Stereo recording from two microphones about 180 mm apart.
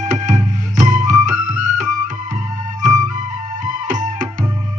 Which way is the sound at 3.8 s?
45° right (ahead or behind).